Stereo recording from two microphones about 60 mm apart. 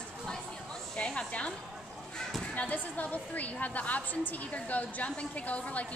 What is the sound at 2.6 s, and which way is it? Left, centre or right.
A woman's voice, left.